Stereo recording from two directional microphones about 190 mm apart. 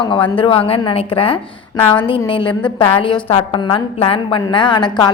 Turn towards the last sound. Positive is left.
turn(degrees=25)  # may be behind; listen again after turning